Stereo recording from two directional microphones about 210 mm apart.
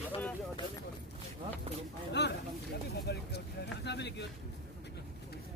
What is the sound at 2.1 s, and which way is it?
Speech, 55° left (ahead or behind).